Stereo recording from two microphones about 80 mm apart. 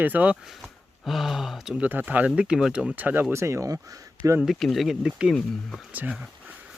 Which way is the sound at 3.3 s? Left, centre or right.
Right.